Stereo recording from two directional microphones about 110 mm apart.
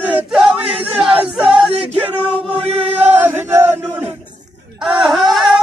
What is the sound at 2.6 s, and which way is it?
Chant, 65° right (ahead or behind).